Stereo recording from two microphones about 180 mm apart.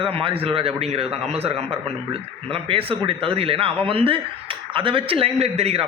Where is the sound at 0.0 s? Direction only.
30° right (ahead or behind).